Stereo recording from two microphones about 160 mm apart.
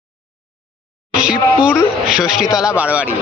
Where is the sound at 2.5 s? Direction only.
20° left (ahead or behind).